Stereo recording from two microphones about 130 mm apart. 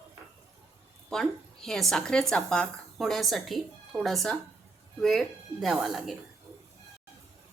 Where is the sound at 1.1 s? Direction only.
5° left (ahead or behind).